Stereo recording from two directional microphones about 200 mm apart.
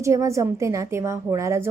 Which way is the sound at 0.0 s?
15° right (ahead or behind).